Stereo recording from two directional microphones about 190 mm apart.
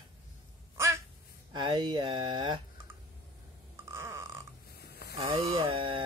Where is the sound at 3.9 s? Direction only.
15° right (ahead or behind).